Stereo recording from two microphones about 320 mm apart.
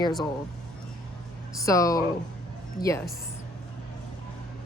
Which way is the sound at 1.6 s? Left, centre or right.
Centre.